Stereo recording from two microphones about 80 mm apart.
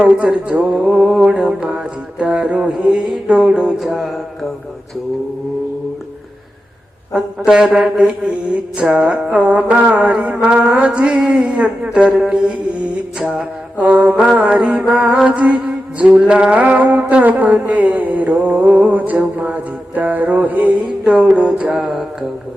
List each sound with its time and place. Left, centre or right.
0.0 s mantra: centre
3.8 s music: centre
7.1 s mantra: centre
21.8 s music: centre